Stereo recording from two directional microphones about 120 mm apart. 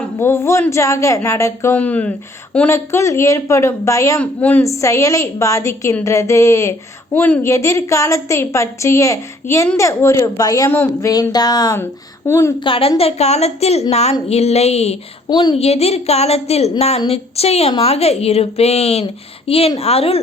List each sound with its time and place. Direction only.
0.2 s a woman's voice: 20° left (ahead or behind)
1.7 s speech: 10° left (ahead or behind)
2.6 s a woman's voice: 25° left (ahead or behind)
4.2 s speech: 10° left (ahead or behind)
4.6 s a woman's voice: 25° left (ahead or behind)
11.8 s a woman's voice: 20° left (ahead or behind)
12.5 s a woman's voice: 45° left (ahead or behind)
13.0 s a woman's voice: 60° left (ahead or behind)
15.3 s speech: 35° left (ahead or behind)
15.5 s a woman's voice: 60° left (ahead or behind)